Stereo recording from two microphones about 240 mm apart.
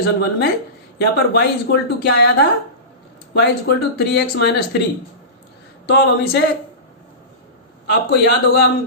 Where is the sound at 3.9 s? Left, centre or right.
Left.